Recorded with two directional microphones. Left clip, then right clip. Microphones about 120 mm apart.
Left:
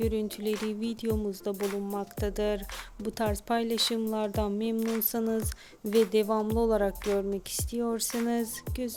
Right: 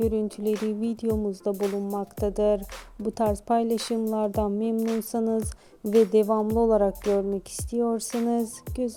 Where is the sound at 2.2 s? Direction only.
45° right (ahead or behind).